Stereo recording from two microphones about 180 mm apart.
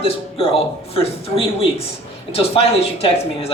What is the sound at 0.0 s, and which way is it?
A woman's voice, 30° left (ahead or behind).